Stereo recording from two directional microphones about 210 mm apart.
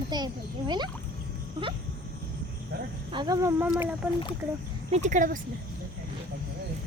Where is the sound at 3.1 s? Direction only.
20° right (ahead or behind).